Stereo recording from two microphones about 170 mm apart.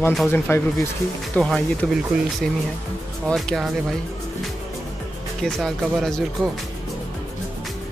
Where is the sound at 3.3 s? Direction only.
Centre (ahead or behind).